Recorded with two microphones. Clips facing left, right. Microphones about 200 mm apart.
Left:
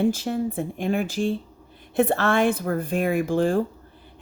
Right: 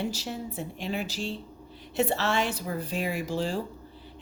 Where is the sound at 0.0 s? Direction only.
50° left (ahead or behind).